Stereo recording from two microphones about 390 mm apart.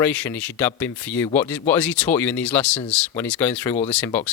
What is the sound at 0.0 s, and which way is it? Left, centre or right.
Speech, centre.